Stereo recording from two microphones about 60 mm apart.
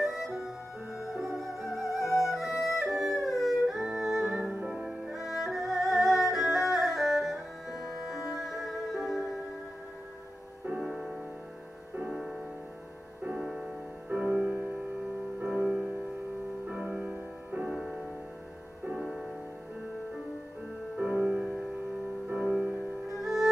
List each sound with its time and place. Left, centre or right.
0.0 s music: centre
5.0 s music: centre
10.8 s music: centre
14.0 s music: centre
17.6 s music: centre
21.0 s music: centre
23.1 s music: centre